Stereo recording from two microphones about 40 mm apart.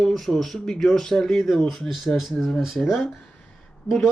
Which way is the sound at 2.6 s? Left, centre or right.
Centre.